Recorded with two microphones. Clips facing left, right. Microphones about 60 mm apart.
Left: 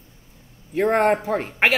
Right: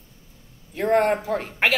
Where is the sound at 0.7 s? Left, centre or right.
Left.